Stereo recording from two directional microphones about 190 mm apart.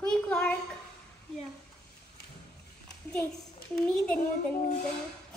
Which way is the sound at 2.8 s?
5° left (ahead or behind).